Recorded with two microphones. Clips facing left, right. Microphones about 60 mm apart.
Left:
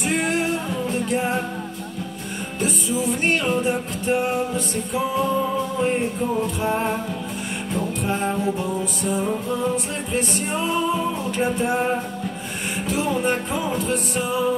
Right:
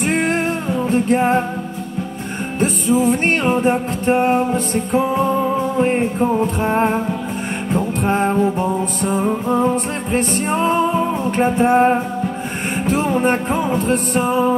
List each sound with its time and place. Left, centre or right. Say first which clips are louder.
0.0 s music: right 4 dB; right
2.6 s music: right 8 dB; right
8.0 s music: right 8 dB; right